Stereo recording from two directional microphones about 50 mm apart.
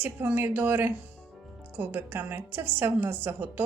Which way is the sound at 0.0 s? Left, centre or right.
Right.